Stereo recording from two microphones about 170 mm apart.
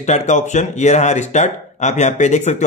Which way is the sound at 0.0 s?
45° left (ahead or behind).